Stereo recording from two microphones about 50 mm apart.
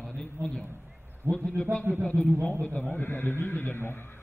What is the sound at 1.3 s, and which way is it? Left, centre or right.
Speech, right.